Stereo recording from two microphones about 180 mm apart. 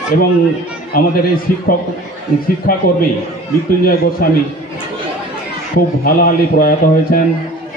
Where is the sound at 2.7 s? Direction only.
50° left (ahead or behind).